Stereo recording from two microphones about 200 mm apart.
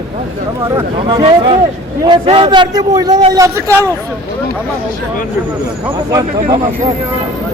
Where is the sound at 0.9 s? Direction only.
25° right (ahead or behind).